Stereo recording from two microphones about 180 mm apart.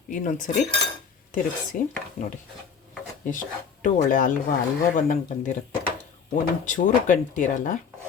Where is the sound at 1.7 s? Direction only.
50° left (ahead or behind).